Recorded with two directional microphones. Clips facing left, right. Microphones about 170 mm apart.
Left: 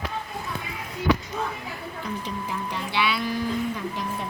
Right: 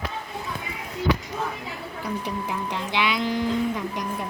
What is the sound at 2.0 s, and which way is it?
Speech, 15° right (ahead or behind).